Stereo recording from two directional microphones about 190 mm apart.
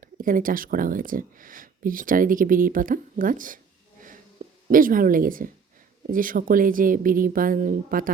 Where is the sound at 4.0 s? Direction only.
45° right (ahead or behind).